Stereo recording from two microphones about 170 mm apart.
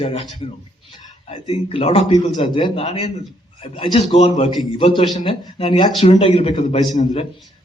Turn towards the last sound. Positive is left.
turn(degrees=40)  # may be behind; listen again after turning